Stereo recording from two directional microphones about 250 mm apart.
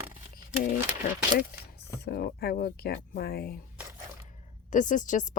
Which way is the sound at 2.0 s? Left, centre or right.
Left.